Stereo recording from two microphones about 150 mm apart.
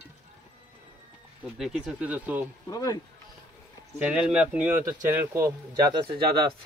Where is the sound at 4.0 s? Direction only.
10° right (ahead or behind).